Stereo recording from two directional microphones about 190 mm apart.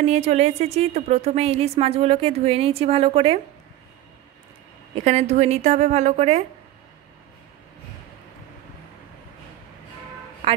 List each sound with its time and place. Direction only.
0.0 s a woman's voice: 35° right (ahead or behind)
4.9 s a woman's voice: 35° right (ahead or behind)
10.4 s a man's voice: 30° right (ahead or behind)